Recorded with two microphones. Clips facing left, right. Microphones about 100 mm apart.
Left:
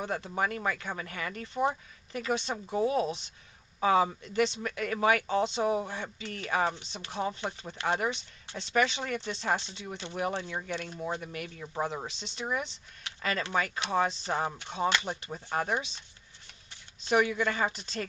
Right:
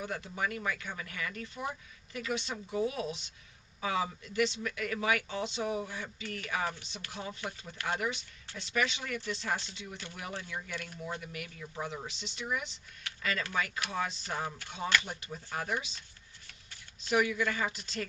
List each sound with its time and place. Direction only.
0.0 s speech: 35° left (ahead or behind)
11.5 s speech: 45° left (ahead or behind)
13.0 s a sound: 20° left (ahead or behind)
13.4 s speech: 30° left (ahead or behind)
17.1 s speech: 30° left (ahead or behind)